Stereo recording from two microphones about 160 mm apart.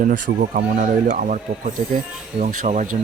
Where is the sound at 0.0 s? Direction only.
55° right (ahead or behind).